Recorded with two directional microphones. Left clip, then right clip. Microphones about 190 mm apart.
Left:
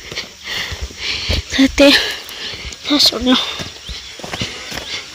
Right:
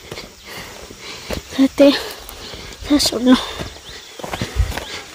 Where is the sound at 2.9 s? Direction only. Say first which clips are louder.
Left 2 dB; 20° right (ahead or behind).